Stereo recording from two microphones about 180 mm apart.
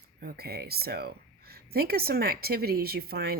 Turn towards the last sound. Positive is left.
turn(degrees=-60)  # may be behind; listen again after turning